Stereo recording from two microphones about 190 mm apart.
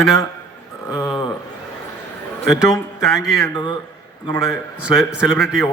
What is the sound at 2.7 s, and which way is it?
Speech, centre (ahead or behind).